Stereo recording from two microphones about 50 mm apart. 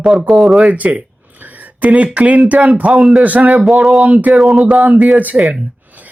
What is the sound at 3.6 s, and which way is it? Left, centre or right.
Speech, centre.